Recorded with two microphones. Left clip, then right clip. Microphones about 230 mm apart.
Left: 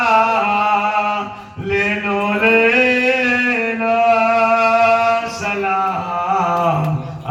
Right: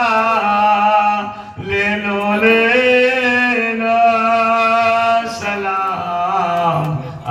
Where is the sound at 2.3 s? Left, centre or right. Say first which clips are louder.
Right 1 dB; right.